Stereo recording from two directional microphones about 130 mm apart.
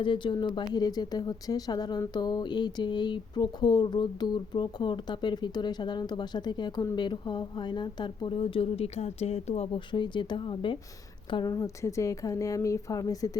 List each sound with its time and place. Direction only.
0.0 s speech: 40° left (ahead or behind)
9.9 s a woman's voice: 35° left (ahead or behind)